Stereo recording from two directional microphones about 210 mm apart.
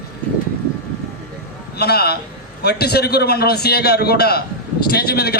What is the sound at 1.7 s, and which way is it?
A man's voice, 50° left (ahead or behind).